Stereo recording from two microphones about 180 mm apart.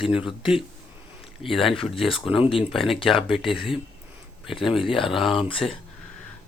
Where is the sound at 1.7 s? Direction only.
30° left (ahead or behind).